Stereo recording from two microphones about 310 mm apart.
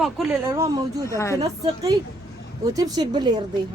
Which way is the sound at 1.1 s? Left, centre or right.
Centre.